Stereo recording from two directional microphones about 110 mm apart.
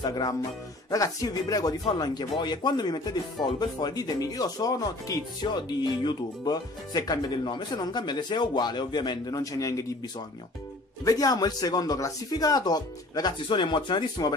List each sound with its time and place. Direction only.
0.0 s speech: 35° left (ahead or behind)
11.1 s speech: 35° left (ahead or behind)